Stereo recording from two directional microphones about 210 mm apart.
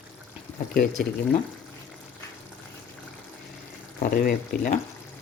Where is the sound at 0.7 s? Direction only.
45° left (ahead or behind).